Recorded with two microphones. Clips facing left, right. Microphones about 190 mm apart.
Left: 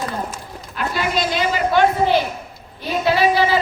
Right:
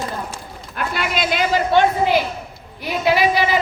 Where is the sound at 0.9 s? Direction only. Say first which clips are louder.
Left 1 dB; 65° right (ahead or behind).